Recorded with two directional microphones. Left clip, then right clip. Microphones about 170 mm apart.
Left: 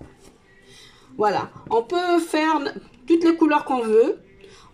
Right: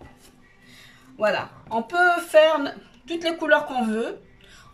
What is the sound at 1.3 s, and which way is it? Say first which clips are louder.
Speech: left 4 dB; 30° left (ahead or behind).